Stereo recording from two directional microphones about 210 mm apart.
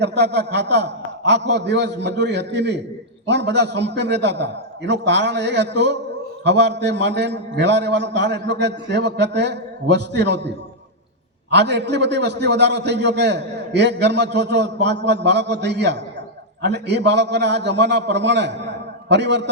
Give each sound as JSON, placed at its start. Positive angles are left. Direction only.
{"t": 0.0, "sound": "a man's voice", "side_deg": -55}
{"t": 11.5, "sound": "a man's voice", "side_deg": -55}